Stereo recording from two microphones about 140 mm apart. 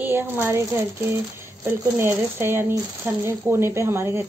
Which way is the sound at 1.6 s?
15° right (ahead or behind).